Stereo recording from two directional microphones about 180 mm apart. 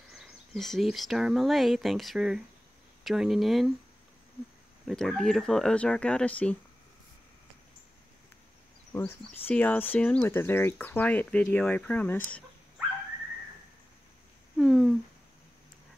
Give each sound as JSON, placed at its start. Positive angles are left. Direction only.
{"t": 0.1, "sound": "speech", "side_deg": 0}
{"t": 4.8, "sound": "speech", "side_deg": 0}
{"t": 8.9, "sound": "speech", "side_deg": 10}
{"t": 14.6, "sound": "speech", "side_deg": 0}